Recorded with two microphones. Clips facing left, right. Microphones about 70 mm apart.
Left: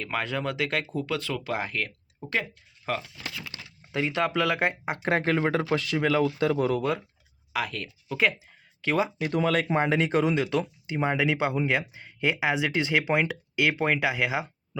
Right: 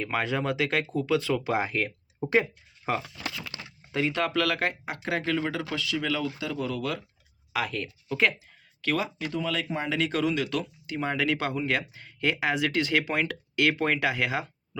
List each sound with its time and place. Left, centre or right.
0.0 s speech: centre
3.9 s speech: centre; by 7.0 s left
7.5 s speech: centre
8.8 s speech: left
9.3 s speech: left
10.0 s speech: left; by 14.8 s centre